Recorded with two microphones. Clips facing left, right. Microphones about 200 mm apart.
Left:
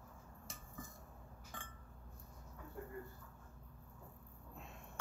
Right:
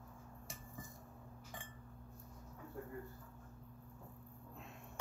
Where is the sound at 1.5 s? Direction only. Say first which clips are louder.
Right 1 dB; 15° right (ahead or behind).